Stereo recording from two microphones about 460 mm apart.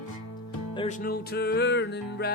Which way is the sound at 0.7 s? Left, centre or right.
Centre.